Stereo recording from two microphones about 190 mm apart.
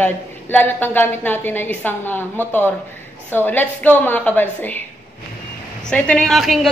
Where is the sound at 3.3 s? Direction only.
10° left (ahead or behind).